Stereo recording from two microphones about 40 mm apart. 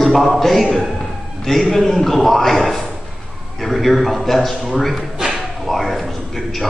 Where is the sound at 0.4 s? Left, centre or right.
Centre.